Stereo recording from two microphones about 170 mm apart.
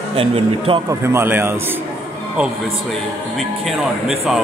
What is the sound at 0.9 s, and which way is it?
A man's voice, 15° right (ahead or behind).